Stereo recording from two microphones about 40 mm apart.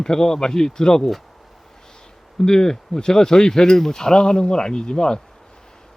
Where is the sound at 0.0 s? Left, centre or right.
Centre.